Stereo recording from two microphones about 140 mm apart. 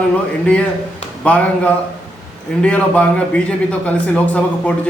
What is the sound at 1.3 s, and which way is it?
A man's voice, 10° left (ahead or behind).